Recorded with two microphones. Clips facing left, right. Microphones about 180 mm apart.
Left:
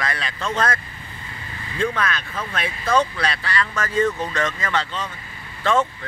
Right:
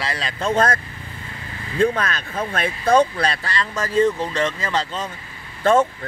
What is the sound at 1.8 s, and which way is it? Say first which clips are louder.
Speech: right 4 dB; 35° right (ahead or behind).